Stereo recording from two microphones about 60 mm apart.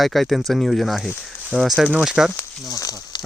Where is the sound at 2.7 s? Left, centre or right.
Left.